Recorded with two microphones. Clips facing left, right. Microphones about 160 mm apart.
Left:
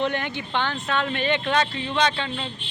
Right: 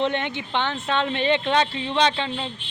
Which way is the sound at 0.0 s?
25° right (ahead or behind).